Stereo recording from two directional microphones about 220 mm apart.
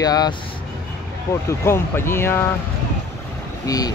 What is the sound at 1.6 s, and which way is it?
Speech, 10° left (ahead or behind).